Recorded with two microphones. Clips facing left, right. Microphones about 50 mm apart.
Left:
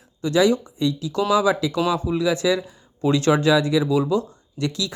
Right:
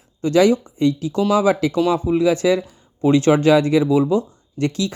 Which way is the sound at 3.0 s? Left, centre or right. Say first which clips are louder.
Right 4 dB; right.